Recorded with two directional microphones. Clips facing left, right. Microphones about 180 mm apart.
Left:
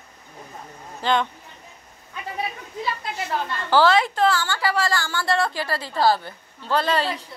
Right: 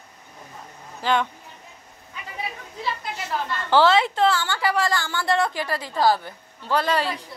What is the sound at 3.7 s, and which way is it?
A woman's voice, 20° right (ahead or behind).